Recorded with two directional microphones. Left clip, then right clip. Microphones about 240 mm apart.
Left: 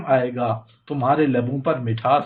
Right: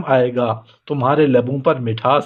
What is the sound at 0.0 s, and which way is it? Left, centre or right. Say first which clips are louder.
Speech: right 4 dB; right.